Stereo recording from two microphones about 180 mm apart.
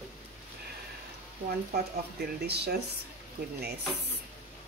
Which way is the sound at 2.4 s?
65° right (ahead or behind).